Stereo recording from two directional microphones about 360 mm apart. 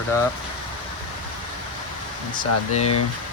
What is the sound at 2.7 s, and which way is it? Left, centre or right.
Speech, centre.